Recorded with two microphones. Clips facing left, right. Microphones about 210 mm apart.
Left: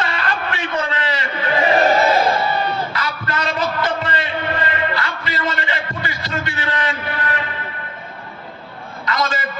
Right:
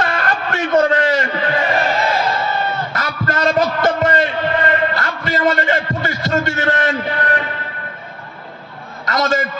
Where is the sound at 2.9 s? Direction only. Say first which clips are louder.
Right 3 dB; 50° right (ahead or behind).